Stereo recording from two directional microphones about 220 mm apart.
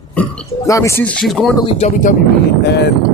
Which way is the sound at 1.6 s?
25° left (ahead or behind).